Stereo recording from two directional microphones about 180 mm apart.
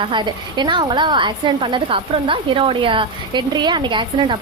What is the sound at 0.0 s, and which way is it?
A woman's voice, 25° right (ahead or behind).